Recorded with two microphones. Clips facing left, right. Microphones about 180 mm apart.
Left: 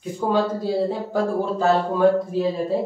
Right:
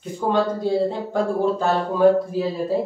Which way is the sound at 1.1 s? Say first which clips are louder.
Right 3 dB; centre (ahead or behind).